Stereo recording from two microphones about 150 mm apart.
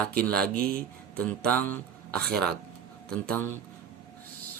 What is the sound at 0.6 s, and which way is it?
Speech, 90° right.